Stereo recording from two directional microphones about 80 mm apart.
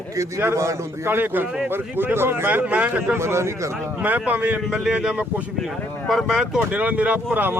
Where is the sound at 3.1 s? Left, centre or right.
Right.